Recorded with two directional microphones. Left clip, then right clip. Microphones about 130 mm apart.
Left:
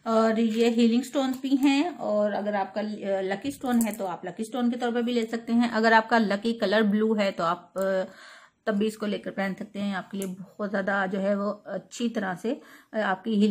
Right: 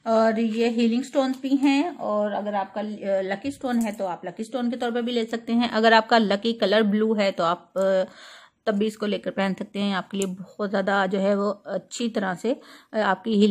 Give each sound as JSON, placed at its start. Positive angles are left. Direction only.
{"t": 0.0, "sound": "a woman's voice", "side_deg": -30}
{"t": 2.0, "sound": "a woman's voice", "side_deg": -20}
{"t": 10.6, "sound": "speech", "side_deg": -30}